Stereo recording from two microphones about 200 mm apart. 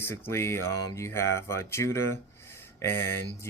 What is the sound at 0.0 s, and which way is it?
Speech, 10° left (ahead or behind).